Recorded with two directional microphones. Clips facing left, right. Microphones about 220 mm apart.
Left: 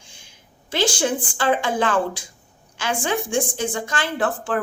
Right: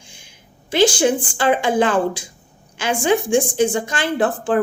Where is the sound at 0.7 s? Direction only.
15° right (ahead or behind).